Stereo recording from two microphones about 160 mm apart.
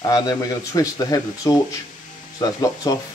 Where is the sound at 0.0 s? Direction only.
20° left (ahead or behind).